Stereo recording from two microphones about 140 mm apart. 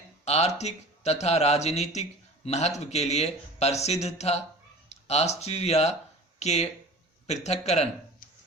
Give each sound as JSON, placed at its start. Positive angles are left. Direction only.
{"t": 0.3, "sound": "speech", "side_deg": 50}